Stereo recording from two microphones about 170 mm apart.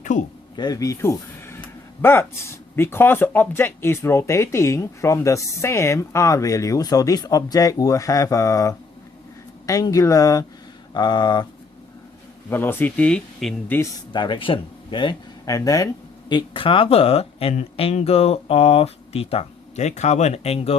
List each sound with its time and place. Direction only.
0.0 s a sound: 45° left (ahead or behind)
0.5 s speech: 20° left (ahead or behind)
12.5 s speech: 10° left (ahead or behind)
14.1 s speech: 25° left (ahead or behind)
16.3 s speech: 30° left (ahead or behind)